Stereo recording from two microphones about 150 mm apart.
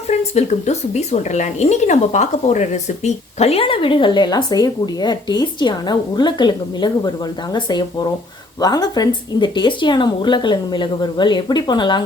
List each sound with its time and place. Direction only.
0.1 s speech: 45° left (ahead or behind); by 12.0 s 30° left (ahead or behind)